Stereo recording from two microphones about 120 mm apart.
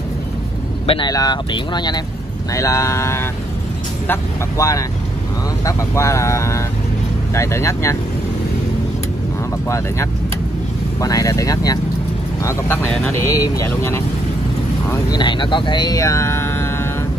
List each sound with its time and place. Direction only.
0.8 s speech: 45° left (ahead or behind)
2.5 s speech: 25° left (ahead or behind)
4.6 s speech: 30° left (ahead or behind)
11.0 s speech: 30° left (ahead or behind)
12.4 s speech: 15° left (ahead or behind)
14.9 s speech: 35° left (ahead or behind); by 16.9 s 20° left (ahead or behind)